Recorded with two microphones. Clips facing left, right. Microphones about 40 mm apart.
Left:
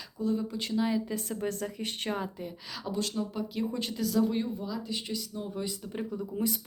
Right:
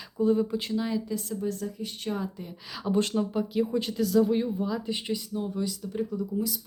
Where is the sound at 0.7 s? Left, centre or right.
Centre.